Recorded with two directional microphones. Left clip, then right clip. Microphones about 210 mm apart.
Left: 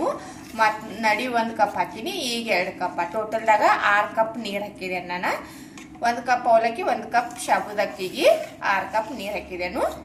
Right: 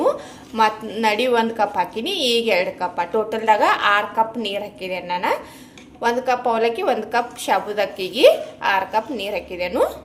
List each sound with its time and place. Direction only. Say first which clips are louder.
0.5 s a woman's voice: right 3 dB; 50° right (ahead or behind)